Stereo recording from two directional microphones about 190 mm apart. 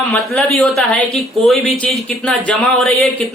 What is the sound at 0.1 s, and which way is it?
Speech, centre (ahead or behind).